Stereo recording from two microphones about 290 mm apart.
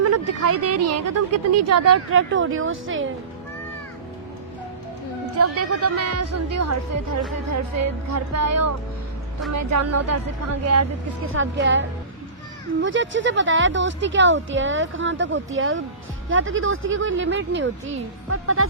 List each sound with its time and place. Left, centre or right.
0.0 s speech: right
5.4 s speech: right
11.3 s speech: right